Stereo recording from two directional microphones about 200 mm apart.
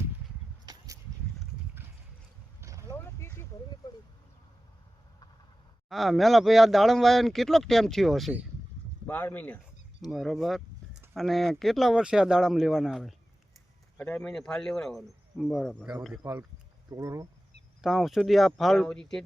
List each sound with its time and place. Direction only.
0.6 s a sound: 20° right (ahead or behind)
2.6 s boat: 15° right (ahead or behind)
2.9 s a sound: 10° left (ahead or behind)
5.9 s speech: centre (ahead or behind)
16.9 s speech: 15° right (ahead or behind)
17.8 s speech: centre (ahead or behind)